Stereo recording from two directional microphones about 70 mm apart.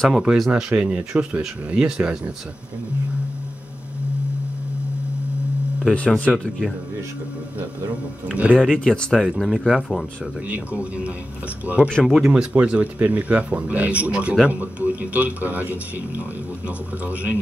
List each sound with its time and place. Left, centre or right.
0.1 s a man's voice: centre
5.9 s speech: centre
6.3 s speech: centre
8.3 s a man's voice: centre
8.5 s speech: centre
10.5 s a man's voice: right
12.0 s speech: centre
12.3 s a man's voice: centre